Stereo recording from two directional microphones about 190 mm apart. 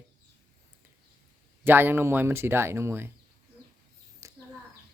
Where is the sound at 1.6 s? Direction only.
10° right (ahead or behind).